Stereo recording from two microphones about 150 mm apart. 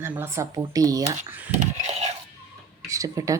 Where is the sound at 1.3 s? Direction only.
15° right (ahead or behind).